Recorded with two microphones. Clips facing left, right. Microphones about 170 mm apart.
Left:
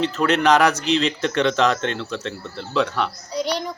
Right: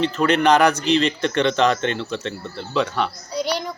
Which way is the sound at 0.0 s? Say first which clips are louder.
Right 1 dB; centre (ahead or behind).